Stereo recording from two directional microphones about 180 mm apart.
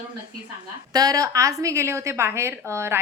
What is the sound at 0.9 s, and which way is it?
A woman's voice, 20° right (ahead or behind).